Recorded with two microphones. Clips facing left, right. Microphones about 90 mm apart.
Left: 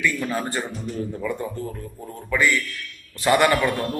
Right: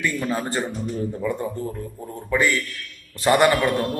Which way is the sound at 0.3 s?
25° right (ahead or behind).